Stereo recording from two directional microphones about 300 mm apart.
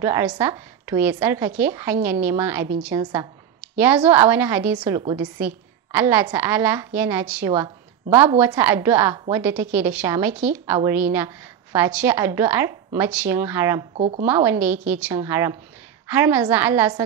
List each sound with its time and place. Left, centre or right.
0.0 s a woman's voice: centre
13.9 s speech: right
14.2 s a woman's voice: centre